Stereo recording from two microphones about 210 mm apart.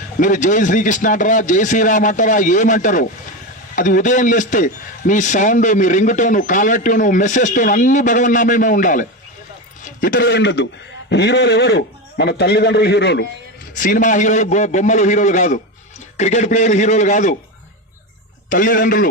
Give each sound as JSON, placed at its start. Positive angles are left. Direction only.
{"t": 0.2, "sound": "a man's voice", "side_deg": 35}
{"t": 13.7, "sound": "a man's voice", "side_deg": 40}
{"t": 18.4, "sound": "a man's voice", "side_deg": 40}